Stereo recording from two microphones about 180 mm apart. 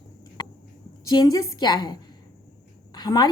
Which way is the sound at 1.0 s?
20° left (ahead or behind).